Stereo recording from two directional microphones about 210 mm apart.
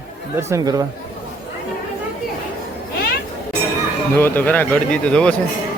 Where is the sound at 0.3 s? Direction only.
15° right (ahead or behind).